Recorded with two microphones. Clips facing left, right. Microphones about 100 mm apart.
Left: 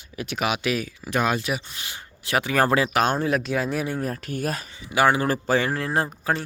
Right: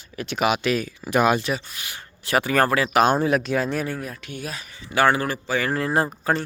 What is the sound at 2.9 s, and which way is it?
Speech, 5° right (ahead or behind).